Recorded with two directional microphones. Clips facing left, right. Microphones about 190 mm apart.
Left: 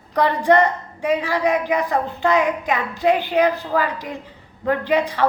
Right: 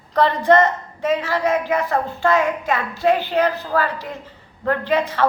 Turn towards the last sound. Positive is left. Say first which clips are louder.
# left 1 dB
turn(degrees=15)  # may be behind; listen again after turning